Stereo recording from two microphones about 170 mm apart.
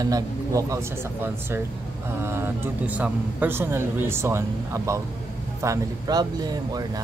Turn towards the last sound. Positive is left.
turn(degrees=-25)  # may be behind; listen again after turning